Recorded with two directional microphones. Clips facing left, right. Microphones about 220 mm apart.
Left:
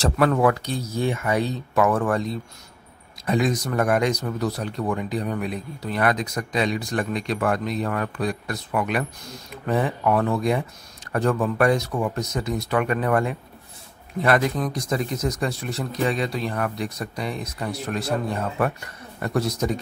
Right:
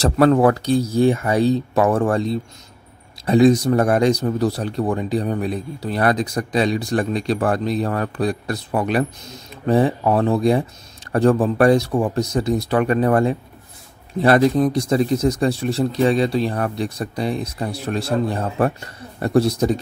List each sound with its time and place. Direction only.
0.0 s speech: 35° right (ahead or behind)